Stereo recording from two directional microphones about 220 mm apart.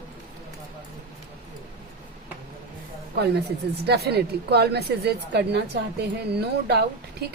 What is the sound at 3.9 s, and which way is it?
Speech, 45° right (ahead or behind).